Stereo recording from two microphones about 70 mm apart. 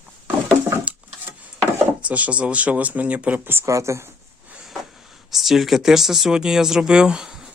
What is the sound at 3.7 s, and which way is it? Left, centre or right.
Speech, right.